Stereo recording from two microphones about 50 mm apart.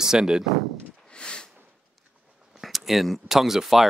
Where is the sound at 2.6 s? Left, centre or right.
Centre.